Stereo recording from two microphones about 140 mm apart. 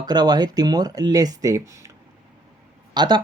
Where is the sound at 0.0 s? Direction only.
30° right (ahead or behind).